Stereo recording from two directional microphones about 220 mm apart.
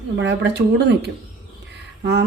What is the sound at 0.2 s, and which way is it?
Speech, 50° right (ahead or behind).